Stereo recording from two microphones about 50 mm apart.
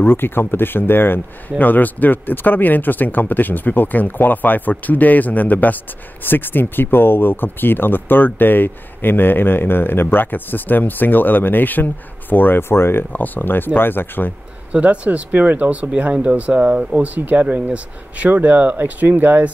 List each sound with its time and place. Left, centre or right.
0.0 s speech: left
13.1 s speech: left
14.7 s speech: right